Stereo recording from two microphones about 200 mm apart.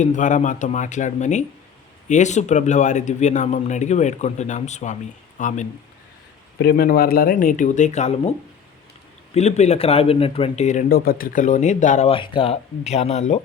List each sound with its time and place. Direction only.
0.0 s speech: 40° left (ahead or behind)
6.6 s speech: 50° left (ahead or behind); by 8.3 s 35° left (ahead or behind)
9.3 s speech: 35° left (ahead or behind)